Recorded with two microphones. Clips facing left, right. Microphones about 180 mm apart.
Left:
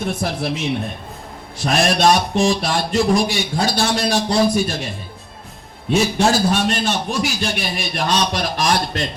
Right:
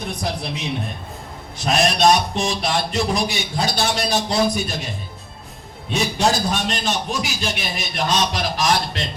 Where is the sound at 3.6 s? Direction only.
20° right (ahead or behind).